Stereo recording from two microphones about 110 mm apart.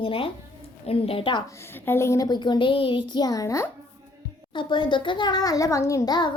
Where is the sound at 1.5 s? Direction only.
25° left (ahead or behind).